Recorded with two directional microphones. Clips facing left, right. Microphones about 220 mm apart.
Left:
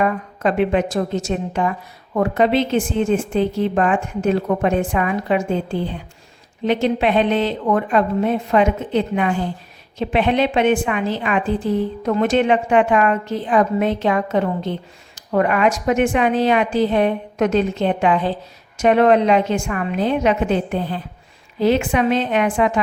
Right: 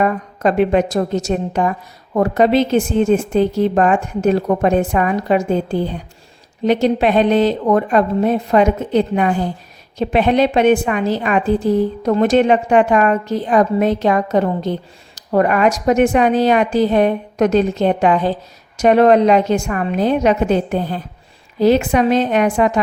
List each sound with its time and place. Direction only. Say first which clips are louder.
0.0 s a woman's voice: right 3 dB; 40° right (ahead or behind)